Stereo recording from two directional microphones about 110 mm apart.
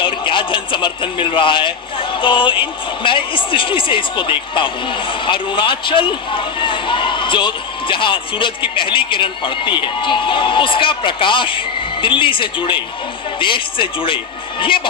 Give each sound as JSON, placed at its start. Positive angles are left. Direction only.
{"t": 0.0, "sound": "a man's voice", "side_deg": 50}